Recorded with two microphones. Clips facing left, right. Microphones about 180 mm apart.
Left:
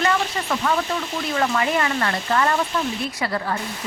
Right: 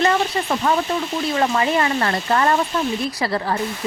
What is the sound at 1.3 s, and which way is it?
Speech, 30° right (ahead or behind).